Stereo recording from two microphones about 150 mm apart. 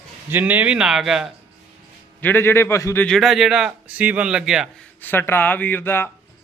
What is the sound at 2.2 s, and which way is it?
Speech, 15° left (ahead or behind).